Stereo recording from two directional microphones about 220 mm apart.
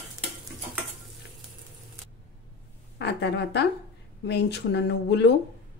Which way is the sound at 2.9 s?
50° left (ahead or behind).